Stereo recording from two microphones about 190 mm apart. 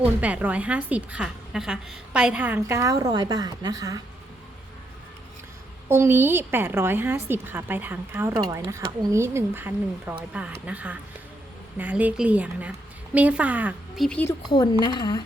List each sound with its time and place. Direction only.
0.0 s a woman's voice: 5° right (ahead or behind)
5.9 s a woman's voice: 10° right (ahead or behind); by 14.3 s 5° left (ahead or behind)
14.5 s speech: 20° left (ahead or behind)